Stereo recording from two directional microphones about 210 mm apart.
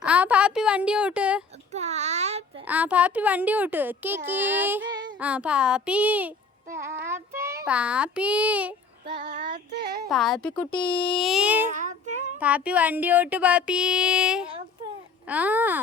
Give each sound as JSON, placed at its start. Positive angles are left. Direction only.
{"t": 0.0, "sound": "a sound", "side_deg": -5}
{"t": 1.7, "sound": "a sound", "side_deg": -30}
{"t": 2.6, "sound": "speech", "side_deg": -5}
{"t": 6.7, "sound": "child singing", "side_deg": -10}
{"t": 9.0, "sound": "child singing", "side_deg": -40}
{"t": 10.1, "sound": "a woman's voice", "side_deg": 0}
{"t": 11.7, "sound": "child singing", "side_deg": -35}
{"t": 12.4, "sound": "speech", "side_deg": -5}